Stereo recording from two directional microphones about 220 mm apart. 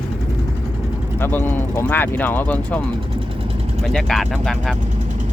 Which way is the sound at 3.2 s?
25° right (ahead or behind).